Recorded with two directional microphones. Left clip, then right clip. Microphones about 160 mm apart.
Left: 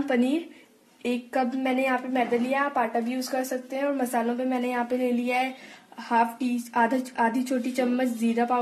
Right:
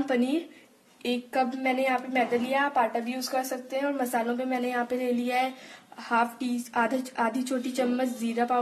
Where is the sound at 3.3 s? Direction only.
25° left (ahead or behind).